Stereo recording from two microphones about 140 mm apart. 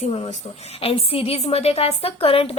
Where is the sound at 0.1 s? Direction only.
45° left (ahead or behind).